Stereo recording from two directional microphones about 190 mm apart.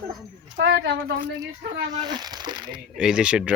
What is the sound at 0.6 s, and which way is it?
Speech, 70° right (ahead or behind).